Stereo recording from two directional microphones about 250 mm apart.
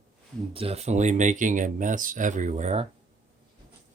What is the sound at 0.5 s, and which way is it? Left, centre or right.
Speech, right.